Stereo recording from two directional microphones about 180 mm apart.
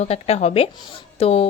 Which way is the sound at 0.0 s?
35° left (ahead or behind).